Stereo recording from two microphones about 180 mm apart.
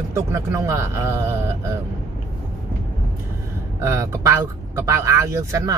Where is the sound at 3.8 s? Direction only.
15° right (ahead or behind).